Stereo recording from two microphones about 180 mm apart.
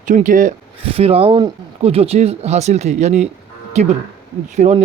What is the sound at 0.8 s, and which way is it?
Speech, 35° right (ahead or behind).